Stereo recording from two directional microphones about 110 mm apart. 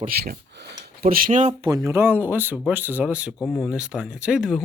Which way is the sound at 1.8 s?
25° right (ahead or behind).